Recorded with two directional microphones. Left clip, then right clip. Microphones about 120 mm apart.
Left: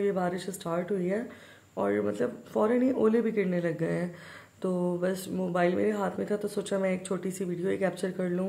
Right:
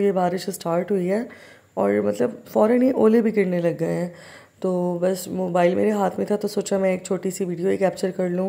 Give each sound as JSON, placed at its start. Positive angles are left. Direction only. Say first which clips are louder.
{"t": 0.0, "sound": "speech", "louder": "right 8 dB", "side_deg": -50}